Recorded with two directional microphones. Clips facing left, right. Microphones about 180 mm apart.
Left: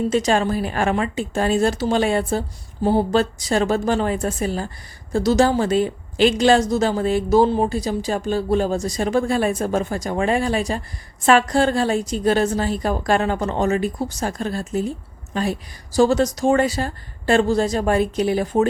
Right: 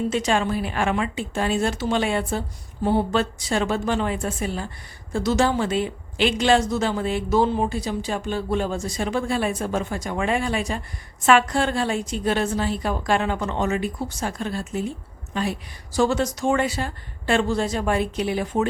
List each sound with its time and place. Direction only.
0.1 s a woman's voice: 40° left (ahead or behind)